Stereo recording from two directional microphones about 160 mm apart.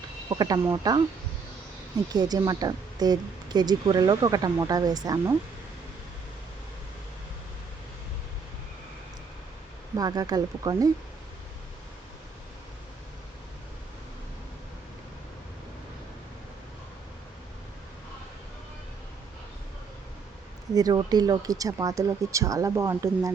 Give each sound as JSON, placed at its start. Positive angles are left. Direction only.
{"t": 0.3, "sound": "speech", "side_deg": -25}
{"t": 2.1, "sound": "speech", "side_deg": -25}
{"t": 9.9, "sound": "speech", "side_deg": -25}
{"t": 20.7, "sound": "speech", "side_deg": -25}